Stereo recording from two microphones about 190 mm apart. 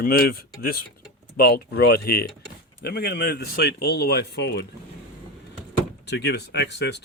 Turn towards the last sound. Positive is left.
turn(degrees=65)  # may be behind; listen again after turning